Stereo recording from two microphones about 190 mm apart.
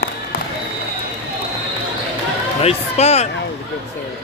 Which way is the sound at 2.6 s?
35° left (ahead or behind).